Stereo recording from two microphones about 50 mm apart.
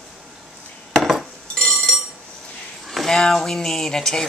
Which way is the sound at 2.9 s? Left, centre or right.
Centre.